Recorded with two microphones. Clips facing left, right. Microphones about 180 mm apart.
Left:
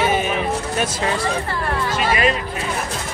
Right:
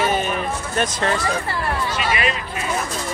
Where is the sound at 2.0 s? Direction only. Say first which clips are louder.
Left 5 dB; 45° left (ahead or behind).